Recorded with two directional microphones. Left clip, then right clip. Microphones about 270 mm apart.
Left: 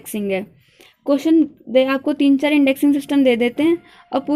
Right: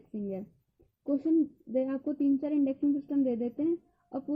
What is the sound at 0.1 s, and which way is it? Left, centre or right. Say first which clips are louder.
A woman's voice: left 16 dB; left.